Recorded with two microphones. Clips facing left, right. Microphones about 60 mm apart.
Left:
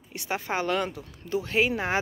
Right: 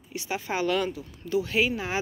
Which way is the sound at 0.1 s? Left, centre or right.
Left.